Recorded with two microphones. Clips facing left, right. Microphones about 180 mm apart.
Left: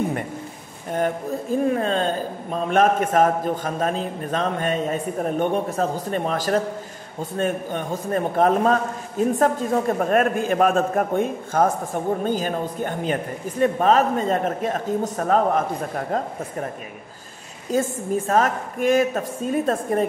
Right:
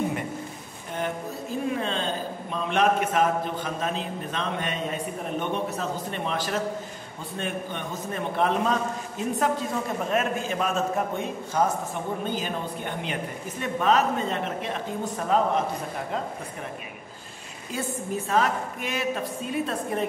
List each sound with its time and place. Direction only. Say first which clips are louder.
1.7 s a man's voice: left 6 dB; 45° left (ahead or behind)
17.6 s a man's voice: left 8 dB; 40° left (ahead or behind)